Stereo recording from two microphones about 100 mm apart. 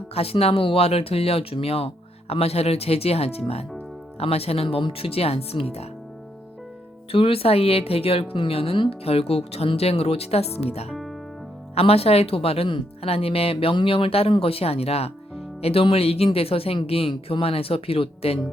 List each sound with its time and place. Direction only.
0.1 s speech: 80° left
2.3 s a woman's voice: 85° left
7.1 s a woman's voice: 70° left (ahead or behind)
12.6 s speech: 65° left (ahead or behind); by 15.1 s 90° left
15.6 s speech: 70° left (ahead or behind)